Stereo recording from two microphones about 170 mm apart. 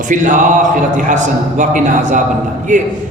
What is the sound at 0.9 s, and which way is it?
Speech, 45° right (ahead or behind).